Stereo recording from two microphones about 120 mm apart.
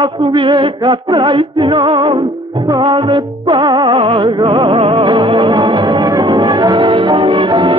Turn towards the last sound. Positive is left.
turn(degrees=-40)  # may be behind; listen again after turning